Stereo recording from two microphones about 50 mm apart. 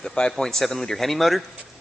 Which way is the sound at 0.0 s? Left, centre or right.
Centre.